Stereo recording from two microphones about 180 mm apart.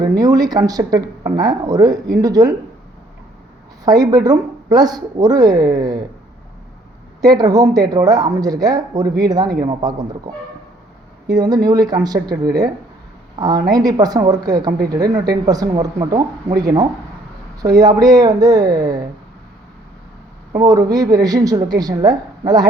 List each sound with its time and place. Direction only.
0.2 s speech: 20° right (ahead or behind)
3.8 s speech: 20° right (ahead or behind)
7.3 s speech: 20° right (ahead or behind)
11.3 s speech: 20° right (ahead or behind)
20.5 s speech: 20° right (ahead or behind)